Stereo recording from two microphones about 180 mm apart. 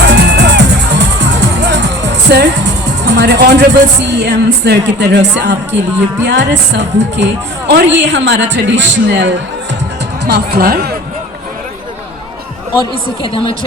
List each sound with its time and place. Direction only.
0.0 s music: 70° right (ahead or behind)
3.0 s a woman's voice: 70° right (ahead or behind)
10.2 s speech: 65° right (ahead or behind)
12.7 s speech: 25° left (ahead or behind)